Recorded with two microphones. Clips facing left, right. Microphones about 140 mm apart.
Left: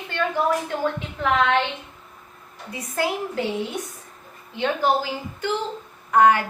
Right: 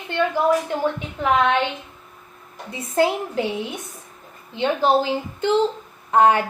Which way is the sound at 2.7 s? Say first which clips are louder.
Right 6 dB; 25° right (ahead or behind).